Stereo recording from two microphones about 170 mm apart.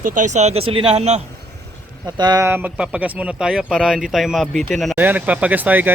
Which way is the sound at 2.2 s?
25° right (ahead or behind).